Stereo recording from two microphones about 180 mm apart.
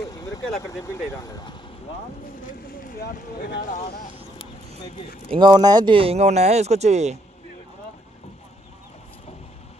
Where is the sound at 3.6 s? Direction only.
40° left (ahead or behind).